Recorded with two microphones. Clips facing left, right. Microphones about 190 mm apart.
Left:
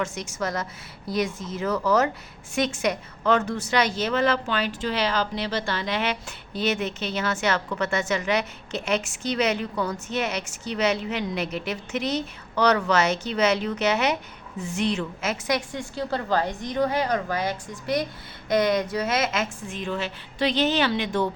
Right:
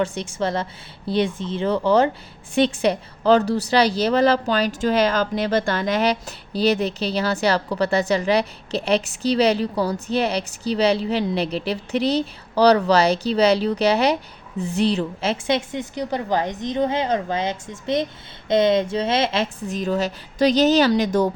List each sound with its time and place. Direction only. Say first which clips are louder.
0.0 s a woman's voice: right 5 dB; 30° right (ahead or behind)